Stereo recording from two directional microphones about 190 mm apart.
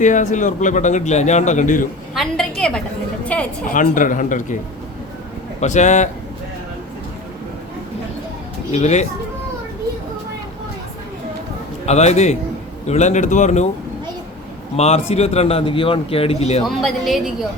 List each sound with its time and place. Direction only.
0.0 s a man's voice: 40° left (ahead or behind)
2.1 s a sound: 5° left (ahead or behind)
3.7 s a man's voice: 45° left (ahead or behind)
5.5 s a man's voice: 40° left (ahead or behind)
8.7 s a man's voice: 35° left (ahead or behind)
11.9 s a man's voice: 35° left (ahead or behind)
14.8 s a man's voice: 35° left (ahead or behind)
16.6 s a woman's voice: centre (ahead or behind)